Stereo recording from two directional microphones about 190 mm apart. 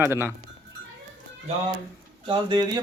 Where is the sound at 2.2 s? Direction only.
25° right (ahead or behind).